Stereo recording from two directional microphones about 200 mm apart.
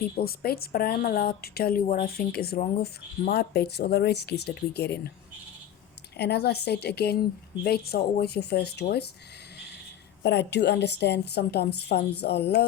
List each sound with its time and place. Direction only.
0.3 s a woman's voice: 50° left (ahead or behind)
6.1 s a woman's voice: 55° left (ahead or behind)
10.2 s a woman's voice: 55° left (ahead or behind)